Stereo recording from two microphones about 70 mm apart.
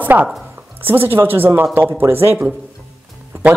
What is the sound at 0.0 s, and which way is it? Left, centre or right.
Speech, right.